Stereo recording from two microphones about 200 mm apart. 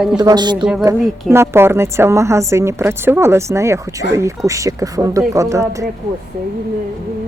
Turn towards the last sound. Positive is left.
turn(degrees=-15)  # may be behind; listen again after turning